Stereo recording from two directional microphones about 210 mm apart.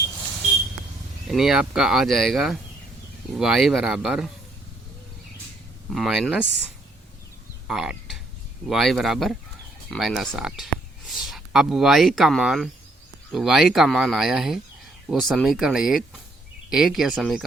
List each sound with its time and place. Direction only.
1.3 s speech: centre (ahead or behind)
5.9 s speech: centre (ahead or behind)
7.7 s speech: 5° right (ahead or behind)